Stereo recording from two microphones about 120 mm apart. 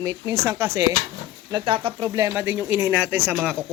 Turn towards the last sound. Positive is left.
turn(degrees=-15)  # may be behind; listen again after turning